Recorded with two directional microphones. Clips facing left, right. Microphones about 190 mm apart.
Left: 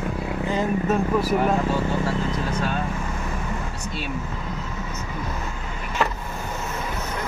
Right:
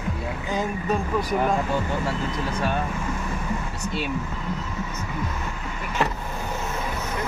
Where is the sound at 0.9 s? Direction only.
5° left (ahead or behind).